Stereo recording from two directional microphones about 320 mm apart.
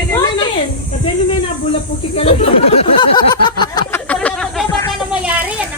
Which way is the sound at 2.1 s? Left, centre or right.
Centre.